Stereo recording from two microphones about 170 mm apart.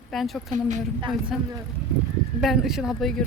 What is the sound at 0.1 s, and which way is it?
Speech, centre (ahead or behind).